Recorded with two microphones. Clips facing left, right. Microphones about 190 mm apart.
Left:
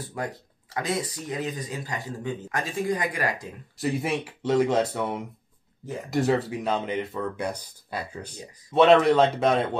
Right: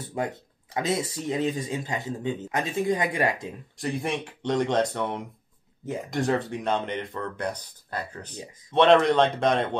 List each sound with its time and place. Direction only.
0.2 s speech: 25° right (ahead or behind)
3.7 s speech: 5° left (ahead or behind)